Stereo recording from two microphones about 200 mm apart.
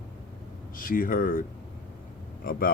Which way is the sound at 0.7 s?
45° left (ahead or behind).